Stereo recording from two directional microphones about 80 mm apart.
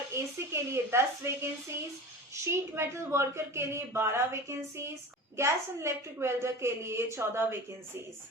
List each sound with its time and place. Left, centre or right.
0.1 s a woman's voice: right